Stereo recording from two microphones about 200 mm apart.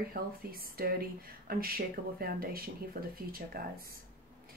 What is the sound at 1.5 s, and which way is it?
Speech, 50° right (ahead or behind).